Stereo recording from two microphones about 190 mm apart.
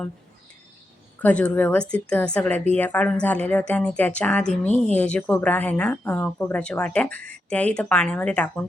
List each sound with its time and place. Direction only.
1.2 s a woman's voice: 5° left (ahead or behind)